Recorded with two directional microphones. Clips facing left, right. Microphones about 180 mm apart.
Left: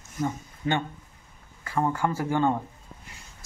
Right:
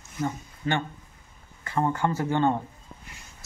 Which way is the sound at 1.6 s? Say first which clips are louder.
Even; 5° left (ahead or behind).